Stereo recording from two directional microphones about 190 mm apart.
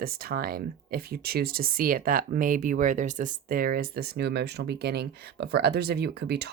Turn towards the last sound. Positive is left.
turn(degrees=-60)  # may be behind; listen again after turning